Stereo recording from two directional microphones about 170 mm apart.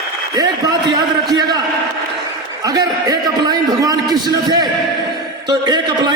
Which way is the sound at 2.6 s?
20° right (ahead or behind).